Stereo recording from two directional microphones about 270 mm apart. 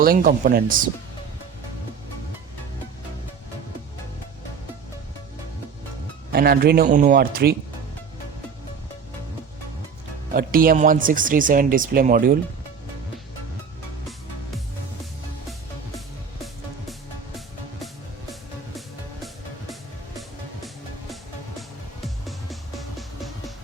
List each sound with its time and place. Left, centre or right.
0.0 s speech: right
6.3 s speech: right
10.3 s speech: right
22.0 s music: centre